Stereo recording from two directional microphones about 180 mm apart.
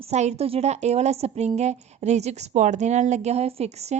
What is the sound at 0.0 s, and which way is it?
A woman's voice, 40° right (ahead or behind).